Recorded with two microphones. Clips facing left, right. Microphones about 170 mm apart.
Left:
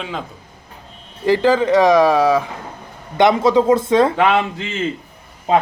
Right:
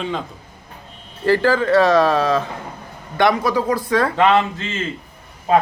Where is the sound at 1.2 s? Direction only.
15° left (ahead or behind).